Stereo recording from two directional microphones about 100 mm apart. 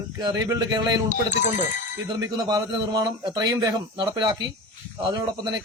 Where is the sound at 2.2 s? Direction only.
35° right (ahead or behind).